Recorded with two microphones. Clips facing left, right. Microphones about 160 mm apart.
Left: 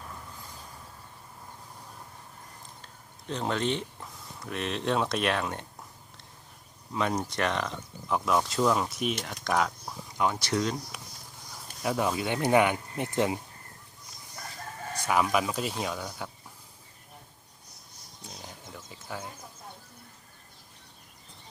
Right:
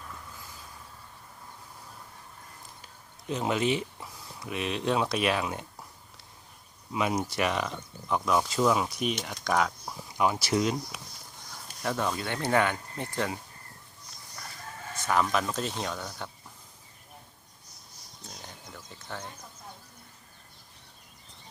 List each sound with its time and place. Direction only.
2.8 s speech: 10° right (ahead or behind)
6.9 s speech: 5° right (ahead or behind)
11.5 s speech: 5° left (ahead or behind)
15.0 s speech: 10° left (ahead or behind)
18.2 s a sound: 5° left (ahead or behind)